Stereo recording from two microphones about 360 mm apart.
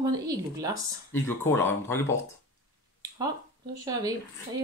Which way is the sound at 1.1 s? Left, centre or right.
Centre.